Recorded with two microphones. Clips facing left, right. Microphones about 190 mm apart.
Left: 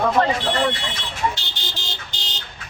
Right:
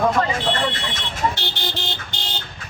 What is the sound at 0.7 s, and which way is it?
Vehicle, 55° right (ahead or behind).